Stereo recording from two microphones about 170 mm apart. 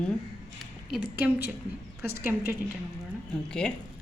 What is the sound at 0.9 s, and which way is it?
A woman's voice, 5° right (ahead or behind).